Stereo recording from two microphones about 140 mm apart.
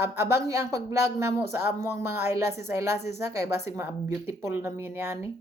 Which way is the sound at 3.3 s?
20° right (ahead or behind).